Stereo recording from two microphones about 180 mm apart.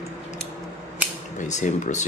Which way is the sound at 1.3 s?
45° left (ahead or behind).